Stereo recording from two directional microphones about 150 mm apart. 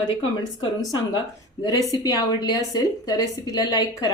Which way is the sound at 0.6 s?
30° left (ahead or behind).